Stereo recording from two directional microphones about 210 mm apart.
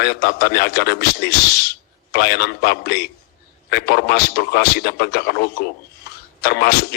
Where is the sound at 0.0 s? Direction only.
50° left (ahead or behind).